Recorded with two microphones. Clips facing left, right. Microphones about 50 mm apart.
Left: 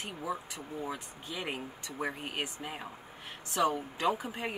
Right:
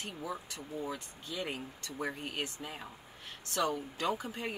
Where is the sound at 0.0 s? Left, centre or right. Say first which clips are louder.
Left 3 dB; centre.